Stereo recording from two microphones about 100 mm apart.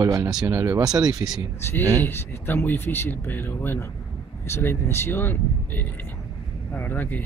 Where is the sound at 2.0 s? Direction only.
20° left (ahead or behind).